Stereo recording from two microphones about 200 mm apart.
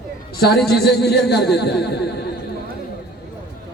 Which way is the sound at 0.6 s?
55° left (ahead or behind).